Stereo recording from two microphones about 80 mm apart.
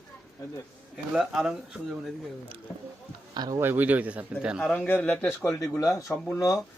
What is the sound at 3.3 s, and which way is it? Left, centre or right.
Speech, right.